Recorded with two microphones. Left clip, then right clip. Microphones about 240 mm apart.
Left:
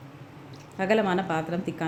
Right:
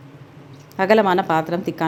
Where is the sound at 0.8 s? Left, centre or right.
Centre.